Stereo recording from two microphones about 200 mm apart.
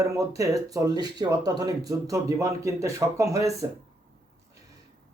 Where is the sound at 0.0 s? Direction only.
15° right (ahead or behind).